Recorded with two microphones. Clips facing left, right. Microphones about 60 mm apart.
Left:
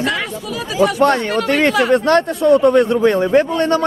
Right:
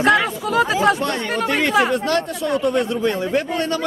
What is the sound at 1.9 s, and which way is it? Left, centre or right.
A man's voice, left.